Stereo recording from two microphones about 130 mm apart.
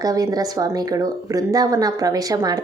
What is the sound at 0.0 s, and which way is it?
Speech, 30° right (ahead or behind).